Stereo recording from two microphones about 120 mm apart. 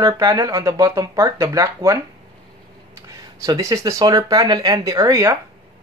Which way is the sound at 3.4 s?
30° right (ahead or behind).